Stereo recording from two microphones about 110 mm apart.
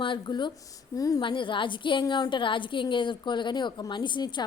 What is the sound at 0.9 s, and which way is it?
Speech, 35° left (ahead or behind).